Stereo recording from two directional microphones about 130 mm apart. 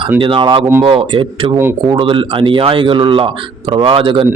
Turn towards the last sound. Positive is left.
turn(degrees=-40)  # may be behind; listen again after turning